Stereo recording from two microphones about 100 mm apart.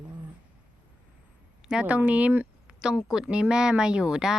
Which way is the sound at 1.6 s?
10° right (ahead or behind).